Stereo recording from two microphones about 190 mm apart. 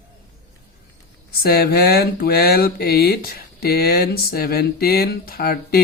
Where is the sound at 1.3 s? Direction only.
55° left (ahead or behind).